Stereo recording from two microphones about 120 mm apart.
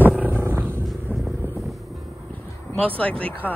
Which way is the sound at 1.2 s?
Centre (ahead or behind).